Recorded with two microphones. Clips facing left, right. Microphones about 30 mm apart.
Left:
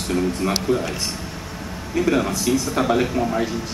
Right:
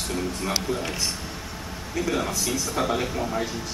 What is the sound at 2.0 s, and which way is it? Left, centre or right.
A man's voice, centre.